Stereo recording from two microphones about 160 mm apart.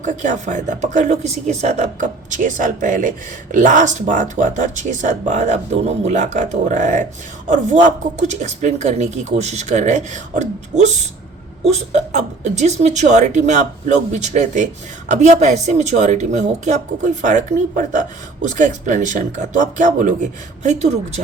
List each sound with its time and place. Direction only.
0.0 s speech: 50° right (ahead or behind)